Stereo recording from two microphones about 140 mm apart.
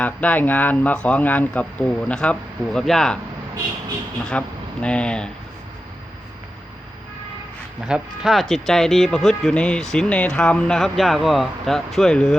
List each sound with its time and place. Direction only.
0.0 s a man's voice: 10° left (ahead or behind)
4.3 s a man's voice: 10° left (ahead or behind)
7.9 s speech: 5° right (ahead or behind)